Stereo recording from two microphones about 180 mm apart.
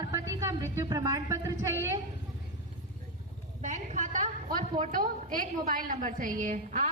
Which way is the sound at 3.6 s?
40° right (ahead or behind).